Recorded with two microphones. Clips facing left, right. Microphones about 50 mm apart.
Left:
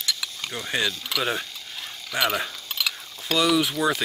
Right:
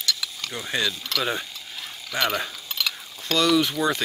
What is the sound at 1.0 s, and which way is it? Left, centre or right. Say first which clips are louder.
Mechanisms: even; centre.